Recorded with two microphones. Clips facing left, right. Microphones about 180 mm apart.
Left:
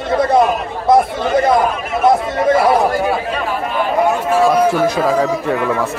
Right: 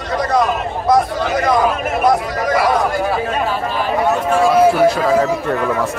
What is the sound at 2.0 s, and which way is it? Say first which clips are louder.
Speech: left 4 dB; 25° left (ahead or behind).